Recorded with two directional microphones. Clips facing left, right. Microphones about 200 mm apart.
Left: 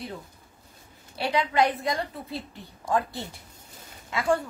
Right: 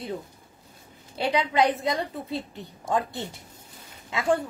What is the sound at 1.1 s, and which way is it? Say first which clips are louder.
A woman's voice: right 1 dB; 20° right (ahead or behind).